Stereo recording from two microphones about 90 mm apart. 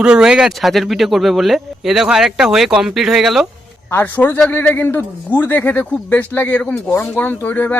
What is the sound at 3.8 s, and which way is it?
A man's voice, 25° left (ahead or behind).